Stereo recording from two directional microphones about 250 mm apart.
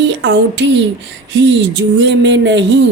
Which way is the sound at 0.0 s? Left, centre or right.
Right.